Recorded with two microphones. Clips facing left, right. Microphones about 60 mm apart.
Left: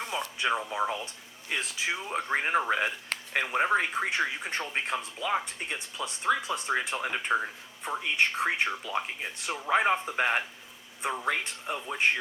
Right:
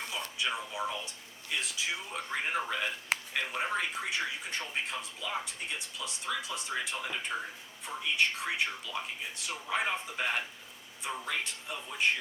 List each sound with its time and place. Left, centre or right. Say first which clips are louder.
0.1 s radio: left 7 dB; left
0.7 s speech: left 5 dB; left